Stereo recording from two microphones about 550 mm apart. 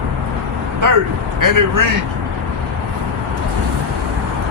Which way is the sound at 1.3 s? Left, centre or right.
Right.